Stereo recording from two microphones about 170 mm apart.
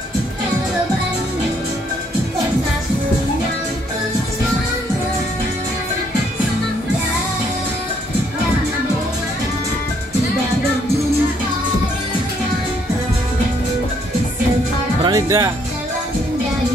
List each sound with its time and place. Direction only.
15.0 s music: 25° right (ahead or behind)